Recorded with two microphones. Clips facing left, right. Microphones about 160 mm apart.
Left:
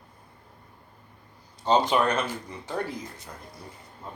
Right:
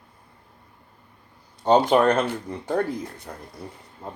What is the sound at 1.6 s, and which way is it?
Speech, 55° right (ahead or behind).